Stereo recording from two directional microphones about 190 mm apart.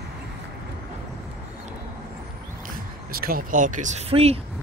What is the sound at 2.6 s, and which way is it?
Speech, 50° right (ahead or behind).